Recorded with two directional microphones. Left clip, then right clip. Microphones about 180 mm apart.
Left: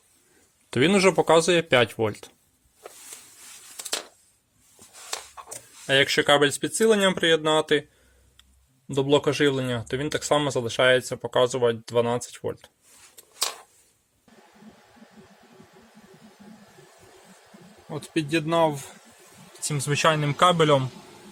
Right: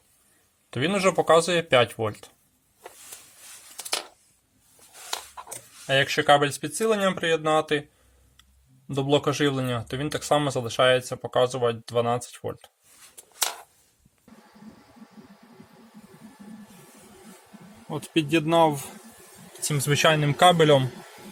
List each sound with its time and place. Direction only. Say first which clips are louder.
0.7 s speech: left 4 dB; 35° left (ahead or behind)
5.9 s speech: even; 30° left (ahead or behind)
8.9 s speech: left 2 dB; 15° left (ahead or behind)
17.8 s speech: right 2 dB; 5° right (ahead or behind)